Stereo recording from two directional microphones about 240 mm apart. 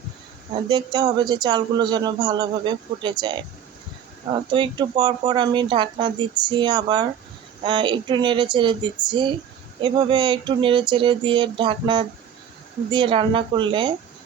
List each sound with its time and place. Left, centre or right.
0.7 s speech: centre